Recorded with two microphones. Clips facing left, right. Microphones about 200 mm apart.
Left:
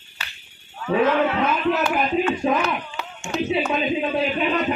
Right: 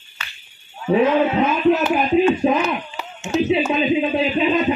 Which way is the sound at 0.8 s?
20° right (ahead or behind).